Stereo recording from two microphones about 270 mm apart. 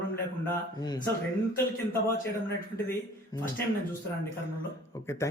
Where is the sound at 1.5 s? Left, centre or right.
Left.